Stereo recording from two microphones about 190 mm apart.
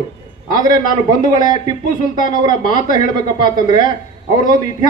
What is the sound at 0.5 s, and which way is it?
Speech, 45° left (ahead or behind).